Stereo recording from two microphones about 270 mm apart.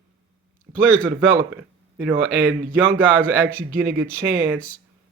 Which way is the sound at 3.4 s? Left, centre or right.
Right.